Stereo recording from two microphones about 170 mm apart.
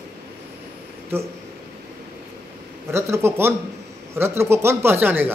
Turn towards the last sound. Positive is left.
turn(degrees=-10)  # may be behind; listen again after turning